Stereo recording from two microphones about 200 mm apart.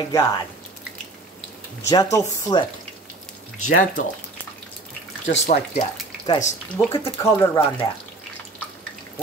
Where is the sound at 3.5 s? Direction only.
90° left.